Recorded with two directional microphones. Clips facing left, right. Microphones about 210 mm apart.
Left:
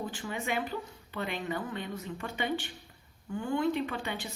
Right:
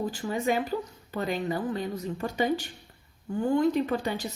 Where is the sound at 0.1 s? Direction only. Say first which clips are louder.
Right 7 dB; 40° right (ahead or behind).